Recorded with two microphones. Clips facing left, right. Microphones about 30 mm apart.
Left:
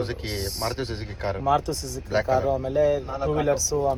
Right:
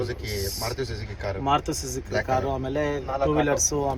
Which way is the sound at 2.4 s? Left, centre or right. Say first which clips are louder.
Left 5 dB; right.